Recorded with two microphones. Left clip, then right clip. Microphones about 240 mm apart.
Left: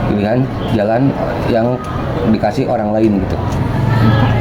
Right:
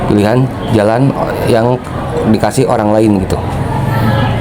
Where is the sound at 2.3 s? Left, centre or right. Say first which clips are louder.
Right 4 dB; right.